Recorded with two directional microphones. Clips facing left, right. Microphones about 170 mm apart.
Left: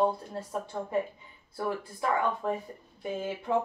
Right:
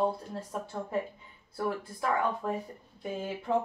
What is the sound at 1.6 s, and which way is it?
Speech, 5° left (ahead or behind).